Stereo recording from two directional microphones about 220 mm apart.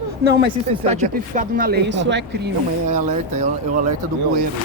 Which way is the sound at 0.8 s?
30° right (ahead or behind).